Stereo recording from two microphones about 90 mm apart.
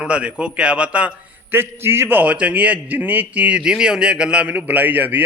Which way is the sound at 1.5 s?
25° right (ahead or behind).